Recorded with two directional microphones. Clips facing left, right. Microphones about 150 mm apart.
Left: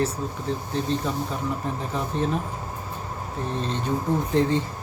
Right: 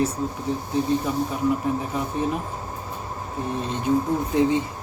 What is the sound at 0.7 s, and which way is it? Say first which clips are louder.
Speech: right 4 dB; 15° right (ahead or behind).